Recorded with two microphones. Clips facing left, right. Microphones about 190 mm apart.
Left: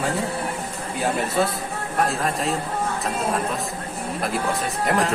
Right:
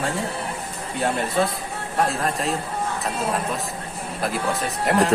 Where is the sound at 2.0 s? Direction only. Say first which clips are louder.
Even; centre (ahead or behind).